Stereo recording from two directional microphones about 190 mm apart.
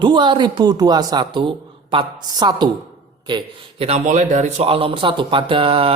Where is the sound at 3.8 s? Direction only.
40° right (ahead or behind).